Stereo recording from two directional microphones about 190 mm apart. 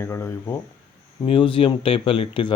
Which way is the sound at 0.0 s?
15° left (ahead or behind).